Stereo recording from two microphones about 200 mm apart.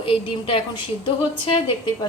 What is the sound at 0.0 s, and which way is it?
A woman's voice, 25° left (ahead or behind).